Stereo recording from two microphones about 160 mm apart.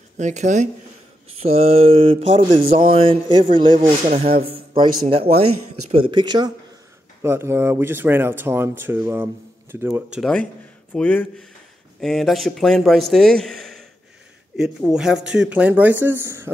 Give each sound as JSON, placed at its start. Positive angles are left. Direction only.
{"t": 0.2, "sound": "speech", "side_deg": -50}
{"t": 7.2, "sound": "speech", "side_deg": -15}
{"t": 10.1, "sound": "a man's voice", "side_deg": 5}